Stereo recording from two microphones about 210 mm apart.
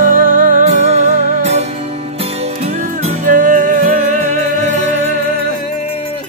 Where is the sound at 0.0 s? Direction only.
40° right (ahead or behind).